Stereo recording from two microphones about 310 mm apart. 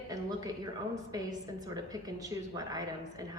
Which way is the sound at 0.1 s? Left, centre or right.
Centre.